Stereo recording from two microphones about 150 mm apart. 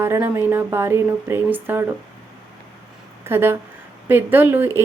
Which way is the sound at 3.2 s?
15° right (ahead or behind).